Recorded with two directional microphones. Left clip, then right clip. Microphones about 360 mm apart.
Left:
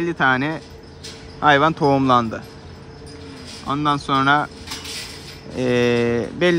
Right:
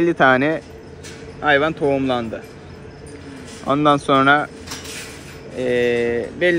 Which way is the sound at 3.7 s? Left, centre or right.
Centre.